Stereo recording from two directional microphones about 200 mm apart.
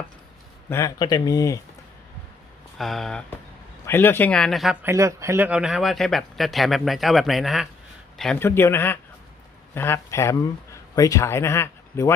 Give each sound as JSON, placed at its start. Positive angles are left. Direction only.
{"t": 0.7, "sound": "speech", "side_deg": 15}
{"t": 2.7, "sound": "speech", "side_deg": 0}